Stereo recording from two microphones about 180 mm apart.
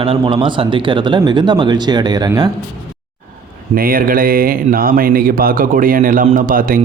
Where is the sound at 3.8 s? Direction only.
55° right (ahead or behind).